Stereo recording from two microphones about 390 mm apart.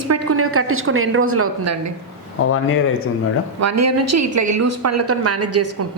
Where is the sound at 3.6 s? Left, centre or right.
Right.